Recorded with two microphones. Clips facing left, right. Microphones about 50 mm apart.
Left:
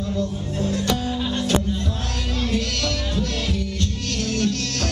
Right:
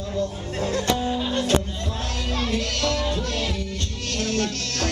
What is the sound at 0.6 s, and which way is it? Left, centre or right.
Music, right.